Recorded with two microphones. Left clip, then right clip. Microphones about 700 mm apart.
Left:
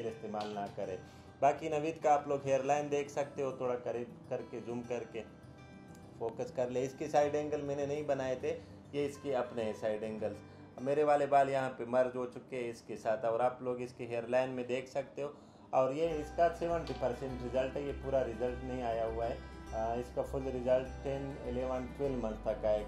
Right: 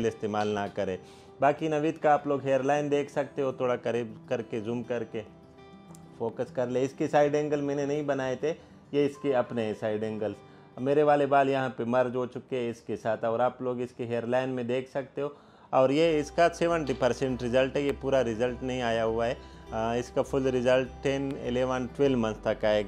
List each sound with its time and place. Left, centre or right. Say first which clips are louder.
0.3 s a man's voice: right 10 dB; right
1.4 s a man's voice: right 6 dB; right
6.3 s a man's voice: right 6 dB; right